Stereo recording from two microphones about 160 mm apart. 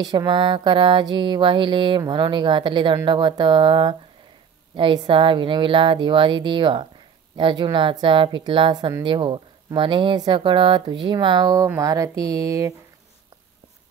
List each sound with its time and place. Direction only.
0.0 s a woman's voice: 25° right (ahead or behind)